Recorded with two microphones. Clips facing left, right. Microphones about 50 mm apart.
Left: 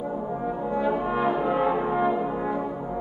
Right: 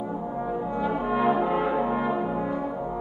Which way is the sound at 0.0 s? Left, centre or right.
Centre.